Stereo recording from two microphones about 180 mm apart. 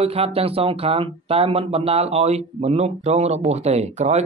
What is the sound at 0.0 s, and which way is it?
Speech, 30° right (ahead or behind).